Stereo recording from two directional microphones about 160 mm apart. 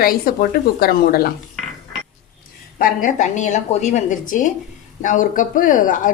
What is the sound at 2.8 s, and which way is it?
A woman's voice, 60° left (ahead or behind).